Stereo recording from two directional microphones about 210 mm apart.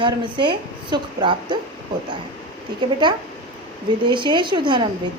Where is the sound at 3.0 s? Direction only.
20° right (ahead or behind).